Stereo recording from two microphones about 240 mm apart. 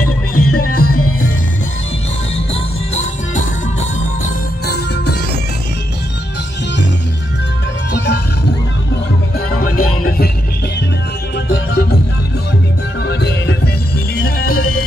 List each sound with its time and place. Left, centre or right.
0.0 s music: left
0.8 s music: left
2.3 s music: left
7.9 s music: left
9.8 s music: left
11.3 s music: left
13.0 s music: left